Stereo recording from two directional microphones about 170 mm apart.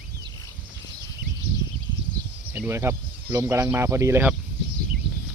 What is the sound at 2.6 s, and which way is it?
Speech, 15° right (ahead or behind).